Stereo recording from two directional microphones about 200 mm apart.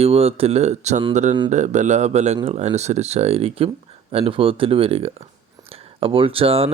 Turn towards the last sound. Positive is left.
turn(degrees=-30)  # may be behind; listen again after turning